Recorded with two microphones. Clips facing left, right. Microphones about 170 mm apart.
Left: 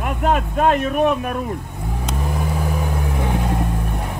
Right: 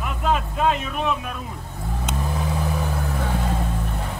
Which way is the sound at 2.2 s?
5° left (ahead or behind).